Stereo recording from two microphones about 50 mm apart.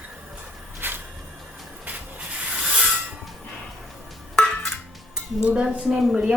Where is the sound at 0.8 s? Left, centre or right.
Right.